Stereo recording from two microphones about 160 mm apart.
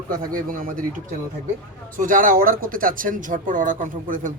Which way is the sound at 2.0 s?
55° right (ahead or behind).